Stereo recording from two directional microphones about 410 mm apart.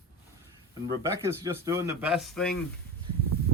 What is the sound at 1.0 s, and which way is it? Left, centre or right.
A man's voice, centre.